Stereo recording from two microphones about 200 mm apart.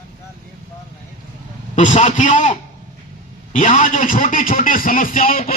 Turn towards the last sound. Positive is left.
turn(degrees=45)  # may be behind; listen again after turning